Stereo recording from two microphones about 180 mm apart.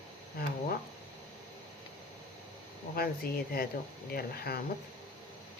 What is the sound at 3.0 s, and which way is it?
Speech, 60° left (ahead or behind).